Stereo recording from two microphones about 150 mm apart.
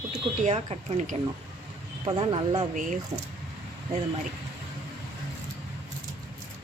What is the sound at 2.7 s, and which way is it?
Speech, 60° right (ahead or behind).